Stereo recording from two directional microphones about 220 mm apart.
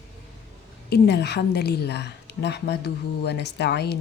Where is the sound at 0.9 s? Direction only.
50° left (ahead or behind).